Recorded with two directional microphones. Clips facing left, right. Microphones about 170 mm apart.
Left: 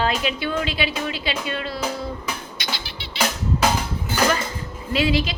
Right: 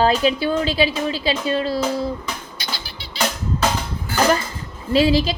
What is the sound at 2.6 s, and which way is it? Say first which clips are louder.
Music: left 1 dB; 40° right (ahead or behind).